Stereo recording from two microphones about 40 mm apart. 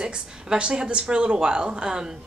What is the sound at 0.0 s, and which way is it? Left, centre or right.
Speech, right.